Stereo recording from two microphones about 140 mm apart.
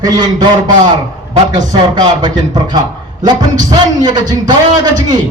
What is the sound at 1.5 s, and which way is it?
A man's voice, 30° right (ahead or behind).